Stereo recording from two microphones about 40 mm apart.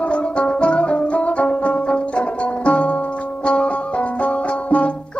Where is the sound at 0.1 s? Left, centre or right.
Left.